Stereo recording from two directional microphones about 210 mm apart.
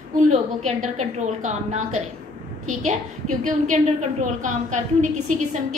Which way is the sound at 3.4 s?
35° right (ahead or behind).